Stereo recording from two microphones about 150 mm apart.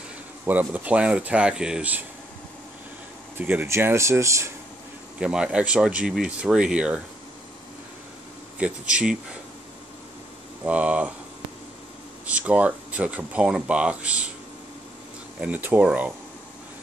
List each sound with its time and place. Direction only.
0.5 s speech: 10° right (ahead or behind)
3.3 s speech: 15° right (ahead or behind)
5.2 s speech: 5° right (ahead or behind)
8.5 s speech: 10° right (ahead or behind)
10.6 s speech: 10° right (ahead or behind)
12.3 s speech: 10° right (ahead or behind)
15.4 s speech: 10° right (ahead or behind)